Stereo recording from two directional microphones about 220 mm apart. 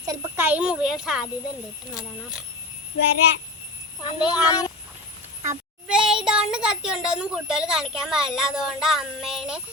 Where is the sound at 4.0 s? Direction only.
20° left (ahead or behind).